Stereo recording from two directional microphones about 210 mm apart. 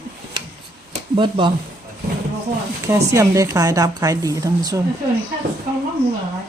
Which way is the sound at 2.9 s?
15° right (ahead or behind).